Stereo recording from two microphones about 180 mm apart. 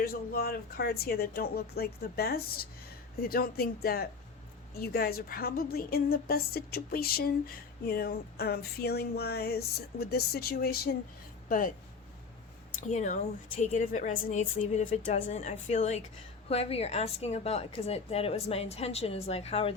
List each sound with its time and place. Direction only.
0.0 s a woman's voice: 55° left (ahead or behind)
11.4 s speech: 50° left (ahead or behind)
12.9 s a woman's voice: 40° left (ahead or behind)